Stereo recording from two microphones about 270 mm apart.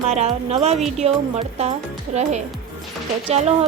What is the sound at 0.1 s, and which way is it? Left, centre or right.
A woman's voice, right.